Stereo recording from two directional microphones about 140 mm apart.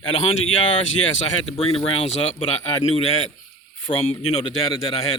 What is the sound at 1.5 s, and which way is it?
Speech, 45° left (ahead or behind).